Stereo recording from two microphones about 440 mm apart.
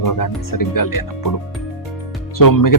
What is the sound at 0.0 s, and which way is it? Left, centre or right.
Speech, left.